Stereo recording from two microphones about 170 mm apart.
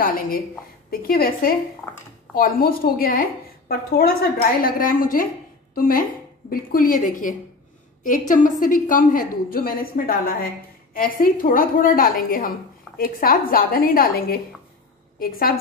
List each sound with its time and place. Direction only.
0.0 s a woman's voice: 60° left (ahead or behind)